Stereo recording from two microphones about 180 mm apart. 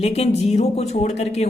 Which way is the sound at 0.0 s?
35° left (ahead or behind).